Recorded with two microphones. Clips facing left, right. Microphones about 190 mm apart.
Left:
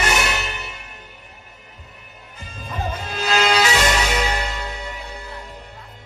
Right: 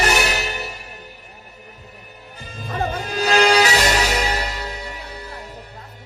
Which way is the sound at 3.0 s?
40° right (ahead or behind).